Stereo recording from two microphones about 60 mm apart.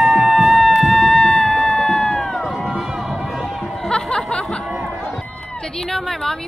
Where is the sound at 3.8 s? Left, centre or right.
Centre.